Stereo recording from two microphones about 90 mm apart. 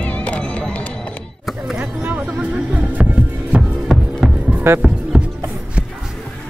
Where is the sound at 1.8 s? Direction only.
20° right (ahead or behind).